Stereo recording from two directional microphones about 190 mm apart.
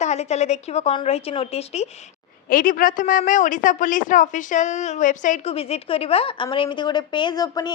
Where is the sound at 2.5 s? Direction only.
50° left (ahead or behind).